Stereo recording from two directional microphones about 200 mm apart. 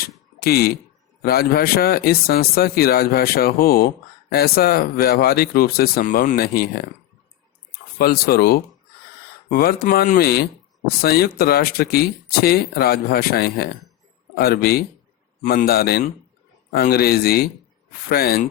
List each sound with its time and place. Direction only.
0.3 s speech: 50° left (ahead or behind)